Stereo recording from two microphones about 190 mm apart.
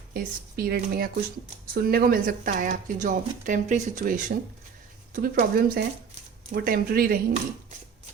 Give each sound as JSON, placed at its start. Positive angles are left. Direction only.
{"t": 0.1, "sound": "speech", "side_deg": -50}